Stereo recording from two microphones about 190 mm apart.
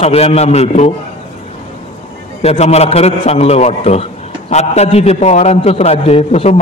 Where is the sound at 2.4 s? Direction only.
35° left (ahead or behind).